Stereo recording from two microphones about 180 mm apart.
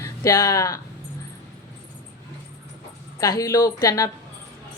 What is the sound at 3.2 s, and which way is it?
Speech, 20° left (ahead or behind).